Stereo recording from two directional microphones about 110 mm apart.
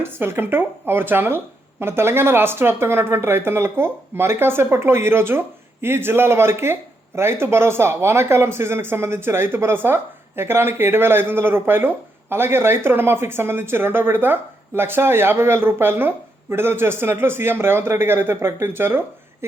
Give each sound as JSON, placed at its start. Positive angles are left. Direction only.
{"t": 0.0, "sound": "speech", "side_deg": -20}